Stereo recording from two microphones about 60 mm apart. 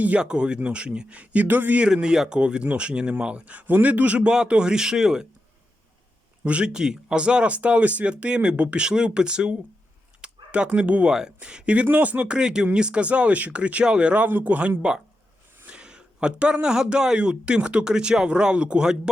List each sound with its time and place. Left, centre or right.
0.0 s speech: centre
1.9 s speech: centre
6.4 s speech: centre
14.8 s speech: centre